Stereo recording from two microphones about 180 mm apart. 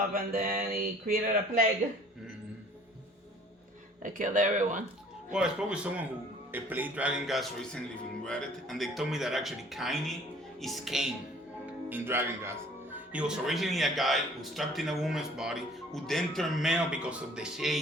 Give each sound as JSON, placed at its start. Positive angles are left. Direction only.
{"t": 0.1, "sound": "speech", "side_deg": -55}
{"t": 4.0, "sound": "speech", "side_deg": -45}
{"t": 5.3, "sound": "speech", "side_deg": -5}